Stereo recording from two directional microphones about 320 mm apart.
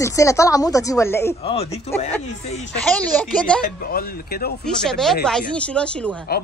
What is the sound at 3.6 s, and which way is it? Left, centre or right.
Speech, left.